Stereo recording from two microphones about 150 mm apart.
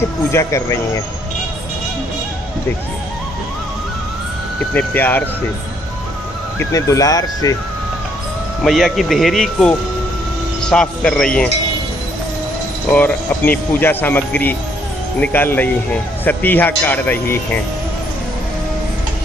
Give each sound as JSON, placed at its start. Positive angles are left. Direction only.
{"t": 0.3, "sound": "speech", "side_deg": 20}
{"t": 4.7, "sound": "speech", "side_deg": 10}
{"t": 6.6, "sound": "speech", "side_deg": 20}
{"t": 8.6, "sound": "speech", "side_deg": 0}
{"t": 12.9, "sound": "speech", "side_deg": 10}